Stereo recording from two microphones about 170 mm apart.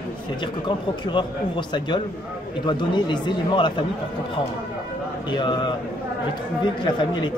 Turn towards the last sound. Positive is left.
turn(degrees=25)  # may be behind; listen again after turning